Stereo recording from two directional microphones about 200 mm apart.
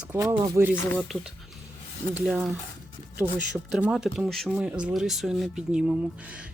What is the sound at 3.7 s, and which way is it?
Speech, 5° right (ahead or behind).